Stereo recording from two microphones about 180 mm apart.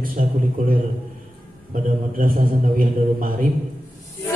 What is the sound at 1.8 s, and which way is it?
A man's voice, 50° right (ahead or behind).